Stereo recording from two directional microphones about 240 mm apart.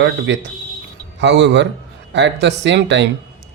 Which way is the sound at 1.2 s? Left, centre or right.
Right.